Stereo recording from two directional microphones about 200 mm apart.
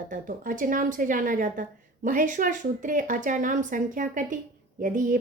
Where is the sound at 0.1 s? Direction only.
40° right (ahead or behind).